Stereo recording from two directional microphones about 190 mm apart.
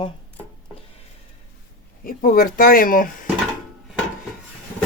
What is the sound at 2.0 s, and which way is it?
Speech, 50° left (ahead or behind).